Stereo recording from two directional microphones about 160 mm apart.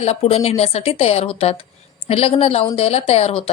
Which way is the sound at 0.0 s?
40° left (ahead or behind).